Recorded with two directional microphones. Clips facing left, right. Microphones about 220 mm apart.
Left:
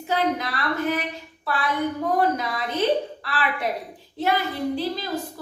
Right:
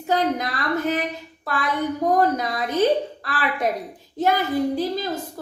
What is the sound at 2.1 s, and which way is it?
Speech, 45° right (ahead or behind).